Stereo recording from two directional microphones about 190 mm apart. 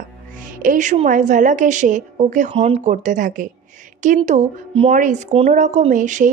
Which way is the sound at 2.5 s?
30° right (ahead or behind).